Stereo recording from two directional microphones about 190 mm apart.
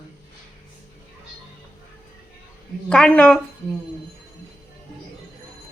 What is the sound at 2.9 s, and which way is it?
Speech, 5° left (ahead or behind).